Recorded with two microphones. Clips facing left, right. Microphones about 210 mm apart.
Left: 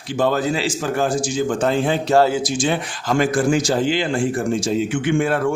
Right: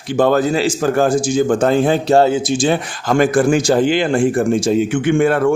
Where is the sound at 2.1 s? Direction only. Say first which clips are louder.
Right 1 dB; 25° right (ahead or behind).